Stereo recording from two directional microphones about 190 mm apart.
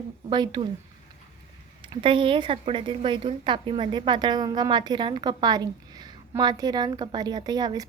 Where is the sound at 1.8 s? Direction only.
25° right (ahead or behind).